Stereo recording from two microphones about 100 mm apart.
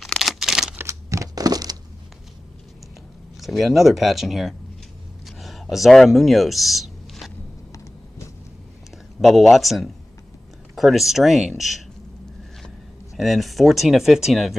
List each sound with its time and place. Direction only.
0.0 s a sound: centre (ahead or behind)
0.7 s crumpling: 30° right (ahead or behind)
3.3 s speech: centre (ahead or behind)
5.4 s a sound: centre (ahead or behind)
9.2 s speech: centre (ahead or behind)
13.1 s speech: centre (ahead or behind)